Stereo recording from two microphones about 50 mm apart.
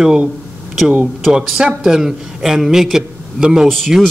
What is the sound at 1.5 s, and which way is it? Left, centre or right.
A man's voice, centre.